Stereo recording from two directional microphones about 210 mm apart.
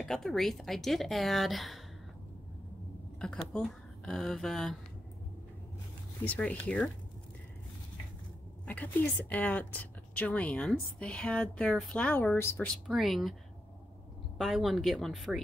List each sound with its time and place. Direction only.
0.0 s speech: centre (ahead or behind)
3.2 s speech: 5° left (ahead or behind)
6.2 s a woman's voice: 5° left (ahead or behind)
8.6 s a woman's voice: 5° left (ahead or behind)
14.4 s speech: centre (ahead or behind)